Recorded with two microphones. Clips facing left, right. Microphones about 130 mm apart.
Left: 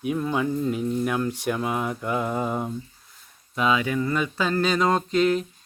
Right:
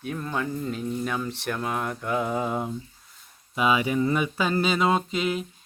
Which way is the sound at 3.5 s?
10° right (ahead or behind).